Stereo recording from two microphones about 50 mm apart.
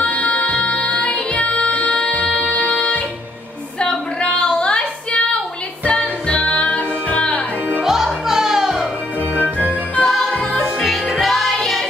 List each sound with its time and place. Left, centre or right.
0.0 s music: left
3.8 s child singing: centre
5.9 s music: left
7.8 s music: centre
9.4 s music: right
10.0 s music: centre